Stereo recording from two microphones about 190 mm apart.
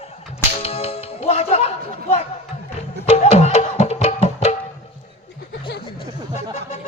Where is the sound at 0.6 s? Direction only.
35° left (ahead or behind).